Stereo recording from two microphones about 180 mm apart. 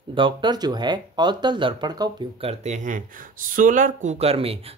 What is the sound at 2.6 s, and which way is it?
Speech, 40° right (ahead or behind).